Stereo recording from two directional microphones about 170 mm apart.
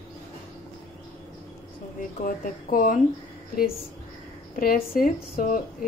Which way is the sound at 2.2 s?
50° left (ahead or behind).